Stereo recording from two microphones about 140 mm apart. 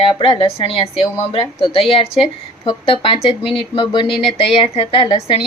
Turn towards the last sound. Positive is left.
turn(degrees=40)  # may be behind; listen again after turning